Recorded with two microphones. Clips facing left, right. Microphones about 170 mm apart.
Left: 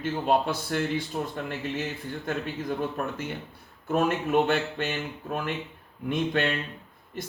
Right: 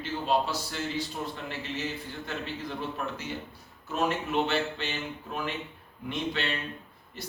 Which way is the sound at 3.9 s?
50° left (ahead or behind).